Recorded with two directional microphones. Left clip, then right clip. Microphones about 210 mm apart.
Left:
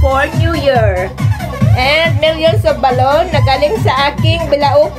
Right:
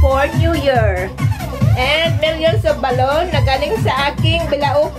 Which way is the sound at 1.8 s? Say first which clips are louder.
Left 4 dB; 30° left (ahead or behind).